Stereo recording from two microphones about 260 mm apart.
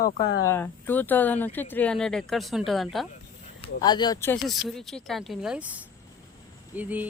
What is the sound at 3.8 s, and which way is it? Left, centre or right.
Speech, centre.